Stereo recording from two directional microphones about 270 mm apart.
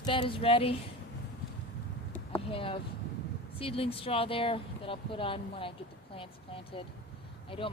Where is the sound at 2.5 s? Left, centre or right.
Centre.